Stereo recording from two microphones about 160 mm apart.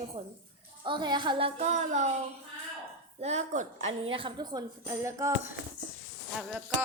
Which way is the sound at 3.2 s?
45° right (ahead or behind).